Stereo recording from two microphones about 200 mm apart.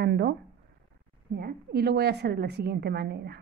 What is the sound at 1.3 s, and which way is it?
A woman's voice, 55° right (ahead or behind).